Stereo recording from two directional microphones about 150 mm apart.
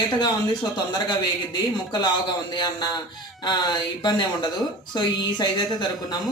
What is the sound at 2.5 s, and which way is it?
Speech, 30° left (ahead or behind).